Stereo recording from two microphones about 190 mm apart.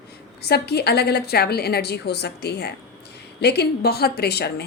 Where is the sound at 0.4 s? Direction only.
55° left (ahead or behind).